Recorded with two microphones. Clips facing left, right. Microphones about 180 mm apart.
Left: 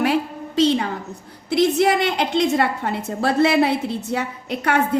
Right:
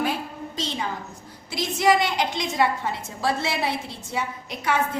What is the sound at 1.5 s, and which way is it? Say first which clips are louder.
A woman's voice: left 5 dB; 60° left (ahead or behind).